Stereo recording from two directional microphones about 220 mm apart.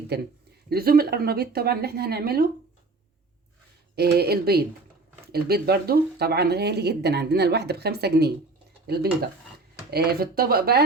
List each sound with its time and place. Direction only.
0.1 s speech: 50° right (ahead or behind)
3.9 s speech: 45° right (ahead or behind)